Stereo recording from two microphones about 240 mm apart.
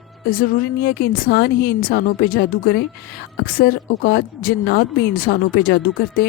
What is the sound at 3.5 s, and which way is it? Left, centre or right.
Speech, left.